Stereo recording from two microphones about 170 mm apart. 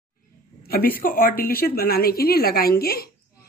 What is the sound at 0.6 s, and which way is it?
A woman's voice, 65° left (ahead or behind).